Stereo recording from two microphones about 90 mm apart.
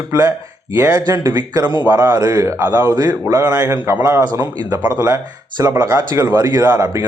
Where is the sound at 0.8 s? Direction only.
45° right (ahead or behind).